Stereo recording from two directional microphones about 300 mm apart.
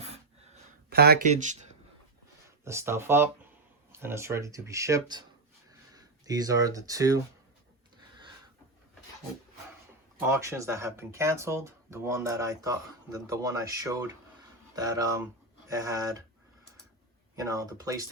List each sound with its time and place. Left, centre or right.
0.9 s speech: right
2.6 s speech: centre
10.2 s speech: centre
17.3 s speech: centre